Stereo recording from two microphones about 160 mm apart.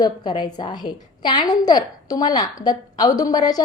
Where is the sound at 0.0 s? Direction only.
25° left (ahead or behind).